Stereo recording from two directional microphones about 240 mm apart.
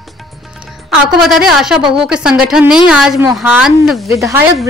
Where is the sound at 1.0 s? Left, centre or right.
Centre.